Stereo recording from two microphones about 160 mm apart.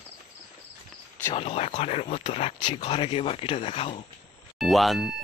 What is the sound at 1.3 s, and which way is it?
Speech, 35° left (ahead or behind).